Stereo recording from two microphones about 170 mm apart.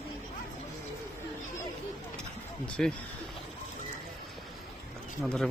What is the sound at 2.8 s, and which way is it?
Speech, 5° left (ahead or behind).